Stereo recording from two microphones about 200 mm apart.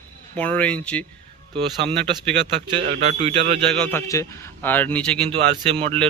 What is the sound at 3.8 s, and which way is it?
A man's voice, 15° left (ahead or behind).